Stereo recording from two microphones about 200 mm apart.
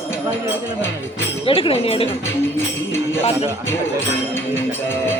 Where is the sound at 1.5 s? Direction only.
25° left (ahead or behind).